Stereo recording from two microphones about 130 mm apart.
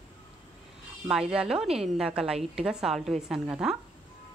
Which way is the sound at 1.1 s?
5° right (ahead or behind).